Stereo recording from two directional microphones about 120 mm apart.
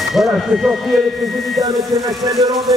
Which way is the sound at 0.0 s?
Centre (ahead or behind).